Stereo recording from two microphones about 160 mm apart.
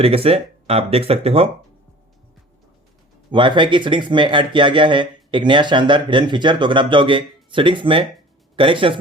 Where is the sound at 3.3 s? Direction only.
30° right (ahead or behind).